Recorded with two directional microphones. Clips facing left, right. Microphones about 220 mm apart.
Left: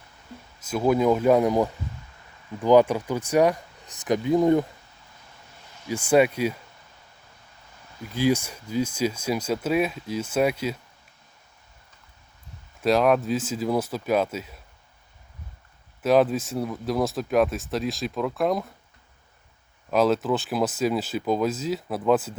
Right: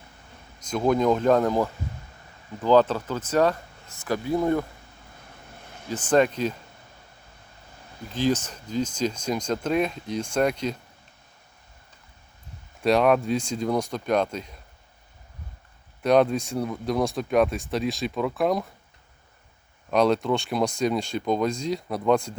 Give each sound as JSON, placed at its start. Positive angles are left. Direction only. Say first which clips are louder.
{"t": 0.6, "sound": "speech", "louder": "left 1 dB", "side_deg": 5}
{"t": 5.6, "sound": "vehicle", "louder": "right 1 dB", "side_deg": -55}
{"t": 5.9, "sound": "speech", "louder": "left 1 dB", "side_deg": 10}
{"t": 8.1, "sound": "speech", "louder": "left 1 dB", "side_deg": 10}
{"t": 12.8, "sound": "speech", "louder": "even", "side_deg": 0}
{"t": 16.0, "sound": "speech", "louder": "even", "side_deg": 5}
{"t": 19.9, "sound": "speech", "louder": "even", "side_deg": 5}